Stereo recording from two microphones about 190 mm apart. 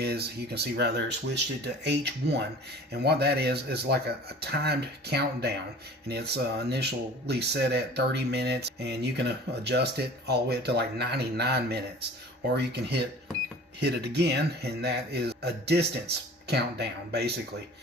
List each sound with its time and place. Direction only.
0.0 s speech: 60° right (ahead or behind)